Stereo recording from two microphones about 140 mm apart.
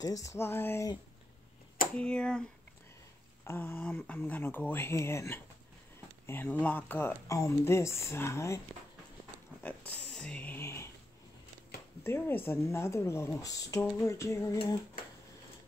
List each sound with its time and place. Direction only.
0.0 s speech: 25° left (ahead or behind)
2.0 s speech: 5° left (ahead or behind)
3.4 s speech: 15° left (ahead or behind)
9.6 s a sound: 10° left (ahead or behind)
12.0 s speech: 15° left (ahead or behind)